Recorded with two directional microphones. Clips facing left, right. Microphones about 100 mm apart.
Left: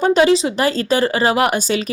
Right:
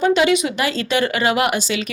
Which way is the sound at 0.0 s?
40° left (ahead or behind).